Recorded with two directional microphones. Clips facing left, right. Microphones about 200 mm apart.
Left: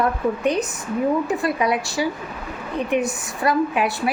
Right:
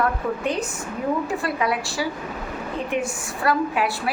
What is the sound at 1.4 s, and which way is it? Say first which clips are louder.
A woman's voice: left 3 dB; 20° left (ahead or behind).